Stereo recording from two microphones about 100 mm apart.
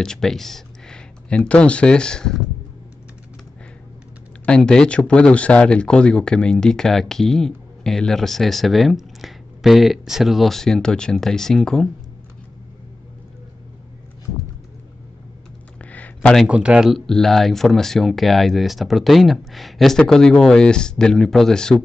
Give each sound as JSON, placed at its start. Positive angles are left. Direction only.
{"t": 0.0, "sound": "speech", "side_deg": 5}
{"t": 4.5, "sound": "speech", "side_deg": 5}
{"t": 15.8, "sound": "a sound", "side_deg": 15}
{"t": 16.4, "sound": "speech", "side_deg": -10}